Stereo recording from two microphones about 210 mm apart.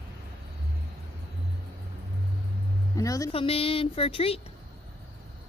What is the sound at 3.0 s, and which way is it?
Speech, 15° left (ahead or behind).